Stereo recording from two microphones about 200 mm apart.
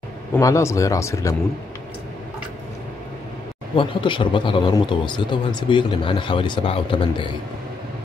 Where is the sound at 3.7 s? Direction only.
25° left (ahead or behind).